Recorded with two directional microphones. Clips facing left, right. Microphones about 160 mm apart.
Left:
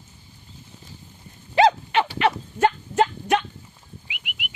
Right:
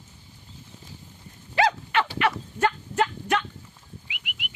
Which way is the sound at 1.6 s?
20° left (ahead or behind).